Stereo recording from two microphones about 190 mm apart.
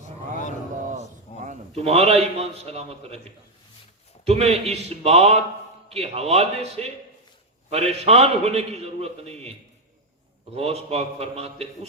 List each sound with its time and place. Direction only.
1.5 s a man's voice: 35° right (ahead or behind)
4.3 s a man's voice: 35° right (ahead or behind)
10.5 s a man's voice: 35° right (ahead or behind)